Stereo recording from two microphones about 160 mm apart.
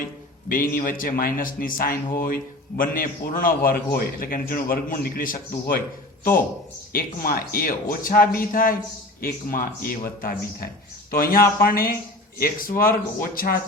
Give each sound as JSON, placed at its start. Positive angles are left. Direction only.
{"t": 0.4, "sound": "a man's voice", "side_deg": 60}
{"t": 6.9, "sound": "a man's voice", "side_deg": 65}